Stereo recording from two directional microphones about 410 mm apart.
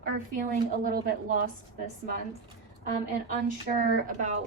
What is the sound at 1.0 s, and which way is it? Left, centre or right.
Speech, right.